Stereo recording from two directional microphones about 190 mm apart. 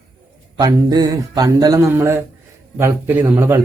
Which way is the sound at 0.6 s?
20° right (ahead or behind).